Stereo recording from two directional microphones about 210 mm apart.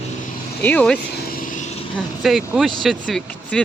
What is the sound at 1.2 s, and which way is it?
Vehicle, 40° left (ahead or behind).